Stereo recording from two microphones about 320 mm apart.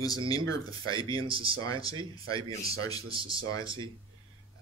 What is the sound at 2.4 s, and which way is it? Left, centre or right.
Speech, centre.